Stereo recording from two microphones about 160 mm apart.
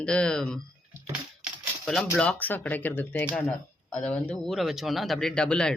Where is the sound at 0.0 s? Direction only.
5° left (ahead or behind).